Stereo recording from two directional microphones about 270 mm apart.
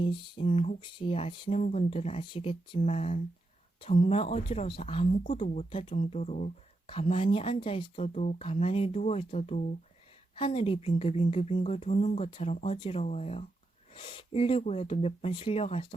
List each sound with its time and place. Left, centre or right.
0.0 s speech: centre